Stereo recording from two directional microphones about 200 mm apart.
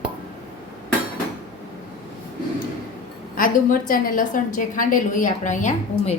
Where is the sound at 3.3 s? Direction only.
45° left (ahead or behind).